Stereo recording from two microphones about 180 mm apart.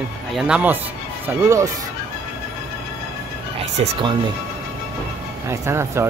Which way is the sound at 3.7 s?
35° right (ahead or behind).